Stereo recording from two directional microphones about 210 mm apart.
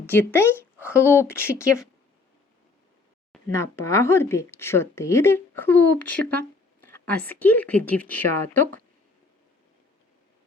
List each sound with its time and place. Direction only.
0.0 s speech: 10° left (ahead or behind)
3.5 s speech: 15° left (ahead or behind)